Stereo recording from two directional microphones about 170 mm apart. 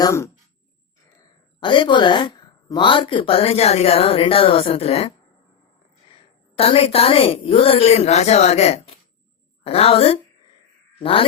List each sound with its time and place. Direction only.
0.0 s speech: 15° left (ahead or behind)
1.6 s a woman's voice: 30° left (ahead or behind)
6.1 s a woman's voice: 35° left (ahead or behind)